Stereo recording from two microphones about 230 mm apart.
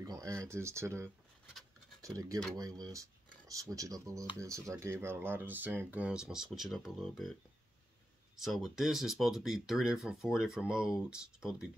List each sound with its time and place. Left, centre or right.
0.0 s a sound: centre
0.5 s speech: centre
8.4 s speech: centre